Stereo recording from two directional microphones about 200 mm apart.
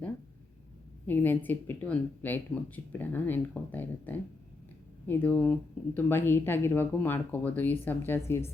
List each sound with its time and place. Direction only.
1.0 s speech: 10° left (ahead or behind)